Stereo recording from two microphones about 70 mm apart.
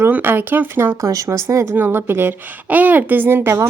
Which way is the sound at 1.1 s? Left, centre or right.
Right.